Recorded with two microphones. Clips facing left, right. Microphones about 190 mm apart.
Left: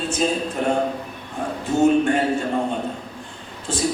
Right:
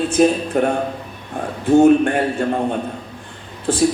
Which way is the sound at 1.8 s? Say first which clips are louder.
Right 4 dB; 60° right (ahead or behind).